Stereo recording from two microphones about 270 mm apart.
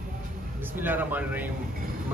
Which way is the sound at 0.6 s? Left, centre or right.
Centre.